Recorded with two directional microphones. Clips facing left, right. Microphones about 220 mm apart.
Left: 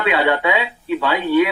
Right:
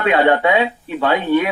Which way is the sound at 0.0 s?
45° right (ahead or behind).